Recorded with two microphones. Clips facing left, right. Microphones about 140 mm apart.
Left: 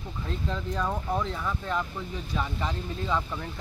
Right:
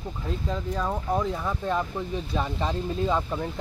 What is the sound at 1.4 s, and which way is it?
Speech, 30° right (ahead or behind).